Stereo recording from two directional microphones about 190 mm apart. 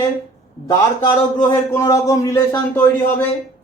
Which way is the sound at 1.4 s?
15° left (ahead or behind).